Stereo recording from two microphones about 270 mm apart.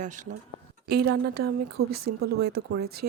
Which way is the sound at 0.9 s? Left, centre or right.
Right.